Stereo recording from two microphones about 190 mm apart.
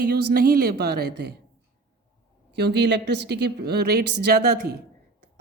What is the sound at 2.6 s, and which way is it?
A woman's voice, 65° right (ahead or behind).